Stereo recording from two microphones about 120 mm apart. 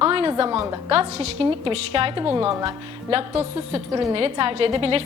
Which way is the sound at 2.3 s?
25° right (ahead or behind).